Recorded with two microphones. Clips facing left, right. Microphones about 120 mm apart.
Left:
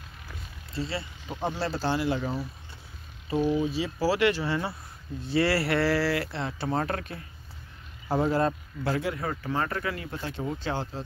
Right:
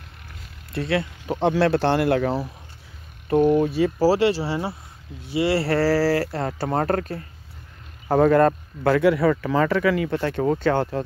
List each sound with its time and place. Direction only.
0.7 s speech: 65° right (ahead or behind)
3.3 s speech: 60° right (ahead or behind)
4.0 s speech: 35° right (ahead or behind)
5.2 s speech: 15° right (ahead or behind)
5.6 s speech: 35° right (ahead or behind)
8.1 s speech: 60° right (ahead or behind)